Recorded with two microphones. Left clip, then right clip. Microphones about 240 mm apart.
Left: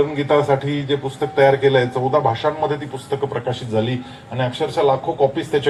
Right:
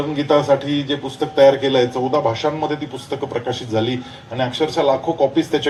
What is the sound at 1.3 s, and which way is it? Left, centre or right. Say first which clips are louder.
Speech: right 1 dB; right.